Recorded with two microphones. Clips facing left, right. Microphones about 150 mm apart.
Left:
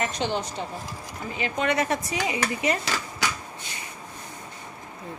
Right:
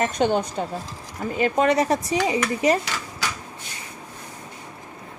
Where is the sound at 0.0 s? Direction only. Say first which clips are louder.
Right 6 dB; 45° right (ahead or behind).